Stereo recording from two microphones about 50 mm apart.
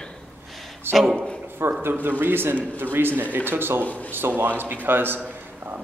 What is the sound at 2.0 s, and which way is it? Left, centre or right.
A man's voice, right.